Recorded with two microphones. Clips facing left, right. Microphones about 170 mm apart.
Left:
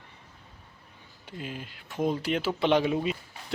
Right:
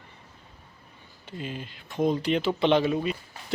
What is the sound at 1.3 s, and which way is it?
Speech, 5° left (ahead or behind).